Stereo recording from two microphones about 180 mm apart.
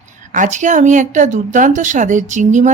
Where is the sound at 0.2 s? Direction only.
45° right (ahead or behind).